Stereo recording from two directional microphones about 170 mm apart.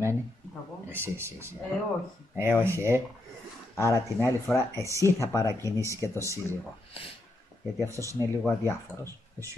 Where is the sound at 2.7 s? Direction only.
15° right (ahead or behind).